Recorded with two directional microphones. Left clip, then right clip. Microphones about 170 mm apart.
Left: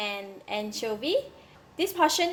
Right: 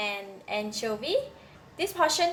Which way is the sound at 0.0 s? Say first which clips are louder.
Even; 45° left (ahead or behind).